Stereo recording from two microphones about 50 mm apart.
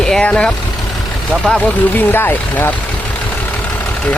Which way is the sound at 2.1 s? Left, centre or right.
Left.